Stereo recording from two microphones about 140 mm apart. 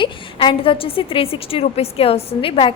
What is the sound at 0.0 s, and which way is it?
A woman's voice, 40° left (ahead or behind).